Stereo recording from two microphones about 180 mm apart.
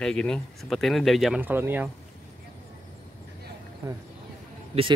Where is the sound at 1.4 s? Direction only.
10° right (ahead or behind).